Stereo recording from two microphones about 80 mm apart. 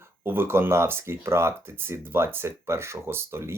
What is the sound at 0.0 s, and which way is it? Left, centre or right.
Speech, right.